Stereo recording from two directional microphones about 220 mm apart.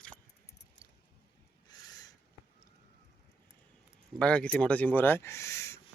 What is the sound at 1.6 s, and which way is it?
Owl, 15° left (ahead or behind).